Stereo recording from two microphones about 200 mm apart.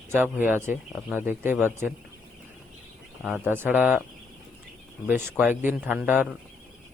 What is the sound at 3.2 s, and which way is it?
Speech, 10° right (ahead or behind).